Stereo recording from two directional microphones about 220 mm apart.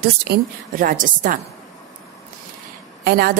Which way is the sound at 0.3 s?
40° right (ahead or behind).